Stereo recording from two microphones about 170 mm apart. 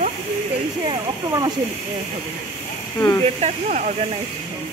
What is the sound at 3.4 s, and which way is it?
Speech, 45° right (ahead or behind).